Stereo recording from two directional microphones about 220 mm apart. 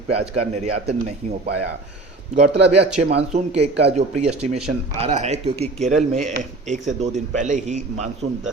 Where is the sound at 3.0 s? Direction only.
30° right (ahead or behind).